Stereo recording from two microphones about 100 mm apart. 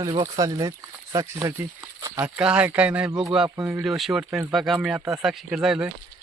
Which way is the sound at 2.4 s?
15° right (ahead or behind).